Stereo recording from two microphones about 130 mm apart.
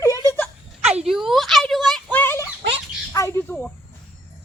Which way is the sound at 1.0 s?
Centre (ahead or behind).